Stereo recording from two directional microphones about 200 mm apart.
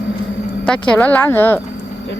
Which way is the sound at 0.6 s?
5° left (ahead or behind).